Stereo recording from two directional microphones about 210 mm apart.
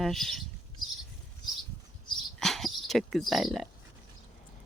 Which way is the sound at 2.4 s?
Centre (ahead or behind).